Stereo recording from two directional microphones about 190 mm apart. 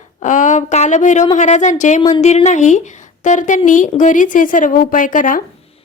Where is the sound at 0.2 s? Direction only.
40° left (ahead or behind).